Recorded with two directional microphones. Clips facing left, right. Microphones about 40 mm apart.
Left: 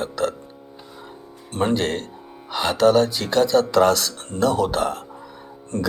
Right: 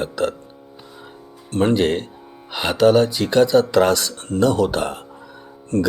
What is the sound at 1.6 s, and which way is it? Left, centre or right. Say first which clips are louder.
Speech: right 4 dB; centre.